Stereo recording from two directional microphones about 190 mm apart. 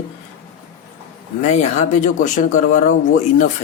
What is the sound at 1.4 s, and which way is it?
Speech, 40° left (ahead or behind).